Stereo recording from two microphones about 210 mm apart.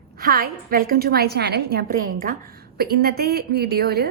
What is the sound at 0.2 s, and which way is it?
A woman's voice, 45° right (ahead or behind).